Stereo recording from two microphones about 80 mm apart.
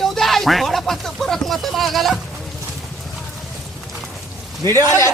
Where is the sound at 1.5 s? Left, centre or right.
Centre.